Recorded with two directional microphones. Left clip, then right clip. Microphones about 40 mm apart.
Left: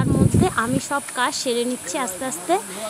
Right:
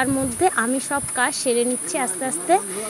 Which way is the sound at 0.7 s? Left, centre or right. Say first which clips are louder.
Even; centre.